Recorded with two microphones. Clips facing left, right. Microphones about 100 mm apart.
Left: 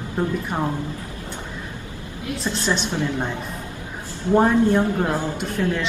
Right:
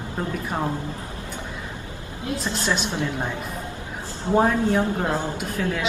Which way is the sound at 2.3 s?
30° right (ahead or behind).